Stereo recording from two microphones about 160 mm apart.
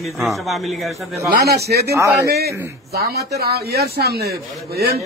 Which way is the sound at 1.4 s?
85° right.